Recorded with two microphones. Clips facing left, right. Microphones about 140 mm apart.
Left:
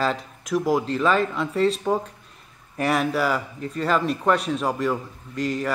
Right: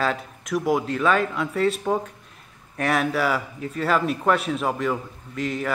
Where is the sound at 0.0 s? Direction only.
Centre (ahead or behind).